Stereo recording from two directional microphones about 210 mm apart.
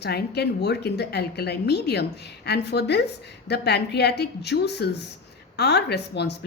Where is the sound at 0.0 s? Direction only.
50° left (ahead or behind).